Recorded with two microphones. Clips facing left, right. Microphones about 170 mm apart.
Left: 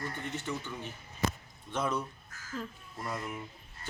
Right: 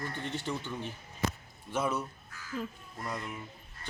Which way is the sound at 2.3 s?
45° left (ahead or behind).